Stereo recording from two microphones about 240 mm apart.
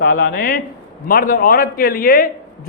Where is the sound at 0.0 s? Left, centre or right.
Left.